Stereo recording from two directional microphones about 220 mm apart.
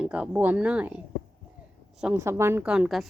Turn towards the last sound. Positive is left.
turn(degrees=0)  # may be behind; listen again after turning